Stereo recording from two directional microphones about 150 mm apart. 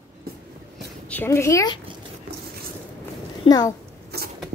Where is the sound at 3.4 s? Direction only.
25° left (ahead or behind).